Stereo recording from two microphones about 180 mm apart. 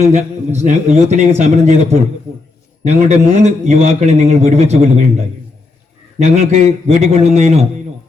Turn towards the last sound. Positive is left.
turn(degrees=-40)  # may be behind; listen again after turning